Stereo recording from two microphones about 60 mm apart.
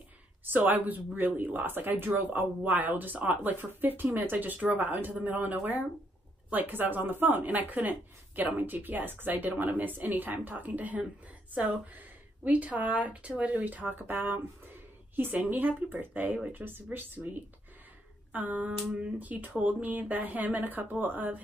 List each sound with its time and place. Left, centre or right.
0.5 s speech: right